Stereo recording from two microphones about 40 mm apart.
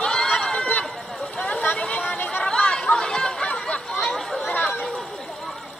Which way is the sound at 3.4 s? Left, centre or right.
Left.